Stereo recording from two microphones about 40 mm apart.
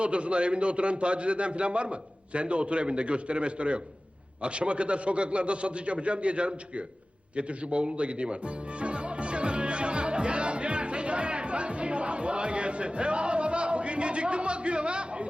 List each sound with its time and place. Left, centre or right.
0.0 s a man's voice: right
8.8 s music: right